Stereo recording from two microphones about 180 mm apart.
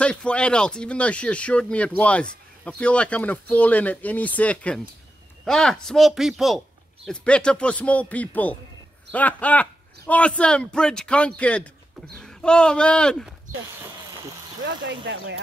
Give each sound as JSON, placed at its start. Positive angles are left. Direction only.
{"t": 0.0, "sound": "speech", "side_deg": 5}
{"t": 14.6, "sound": "speech", "side_deg": -85}